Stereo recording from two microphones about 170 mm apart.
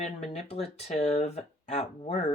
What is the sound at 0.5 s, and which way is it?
Speech, 40° left (ahead or behind).